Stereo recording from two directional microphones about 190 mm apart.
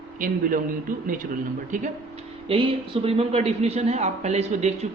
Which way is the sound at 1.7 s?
45° right (ahead or behind).